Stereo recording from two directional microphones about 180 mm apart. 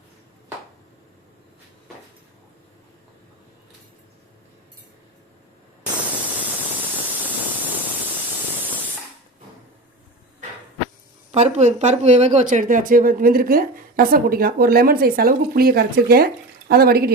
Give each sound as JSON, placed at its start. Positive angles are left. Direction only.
{"t": 11.3, "sound": "a woman's voice", "side_deg": -40}